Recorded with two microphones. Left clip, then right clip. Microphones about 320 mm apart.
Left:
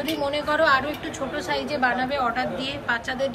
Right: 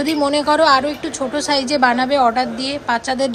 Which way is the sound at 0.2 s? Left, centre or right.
Centre.